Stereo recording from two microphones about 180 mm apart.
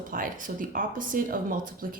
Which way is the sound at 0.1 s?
50° right (ahead or behind).